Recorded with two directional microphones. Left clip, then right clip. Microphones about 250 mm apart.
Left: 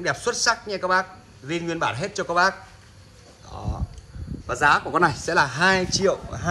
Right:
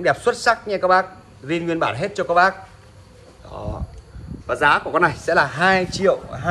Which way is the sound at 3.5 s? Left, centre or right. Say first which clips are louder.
Right 5 dB; centre.